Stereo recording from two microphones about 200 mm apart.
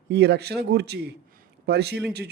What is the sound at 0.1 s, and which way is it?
Speech, 55° right (ahead or behind).